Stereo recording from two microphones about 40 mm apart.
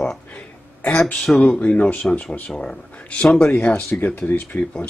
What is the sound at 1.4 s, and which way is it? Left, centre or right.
Speech, left.